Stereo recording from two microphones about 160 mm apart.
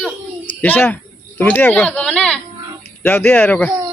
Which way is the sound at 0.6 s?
10° left (ahead or behind).